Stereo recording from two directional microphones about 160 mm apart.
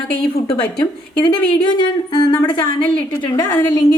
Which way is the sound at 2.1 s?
25° left (ahead or behind).